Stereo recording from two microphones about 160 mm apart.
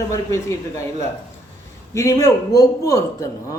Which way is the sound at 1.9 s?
20° left (ahead or behind).